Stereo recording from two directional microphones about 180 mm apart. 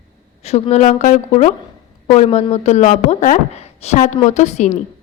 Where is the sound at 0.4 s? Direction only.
35° left (ahead or behind).